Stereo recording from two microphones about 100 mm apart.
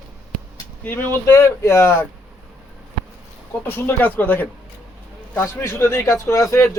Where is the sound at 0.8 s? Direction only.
20° left (ahead or behind).